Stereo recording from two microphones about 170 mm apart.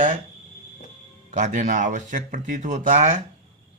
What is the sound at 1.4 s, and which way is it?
Speech, 45° right (ahead or behind).